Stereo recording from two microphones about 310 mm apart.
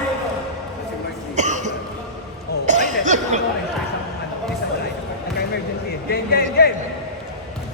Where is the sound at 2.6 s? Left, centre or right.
Right.